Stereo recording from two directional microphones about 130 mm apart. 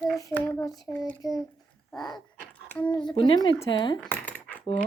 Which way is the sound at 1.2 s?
30° left (ahead or behind).